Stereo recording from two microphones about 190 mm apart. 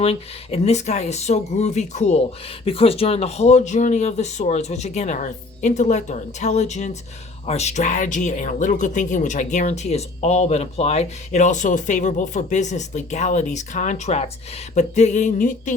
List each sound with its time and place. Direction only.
0.0 s speech: 30° left (ahead or behind)